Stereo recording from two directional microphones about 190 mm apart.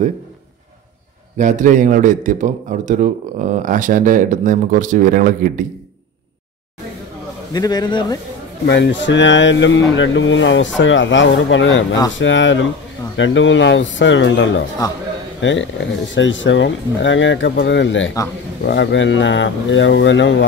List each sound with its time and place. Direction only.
1.4 s a man's voice: 40° right (ahead or behind)
7.5 s a man's voice: 20° left (ahead or behind)
8.6 s speech: 70° left (ahead or behind)
18.6 s speech: 65° left (ahead or behind)